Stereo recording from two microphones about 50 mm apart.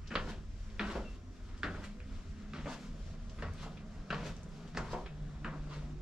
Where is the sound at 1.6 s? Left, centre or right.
Centre.